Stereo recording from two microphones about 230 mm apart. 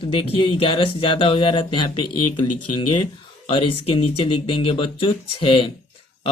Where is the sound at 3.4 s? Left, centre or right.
Left.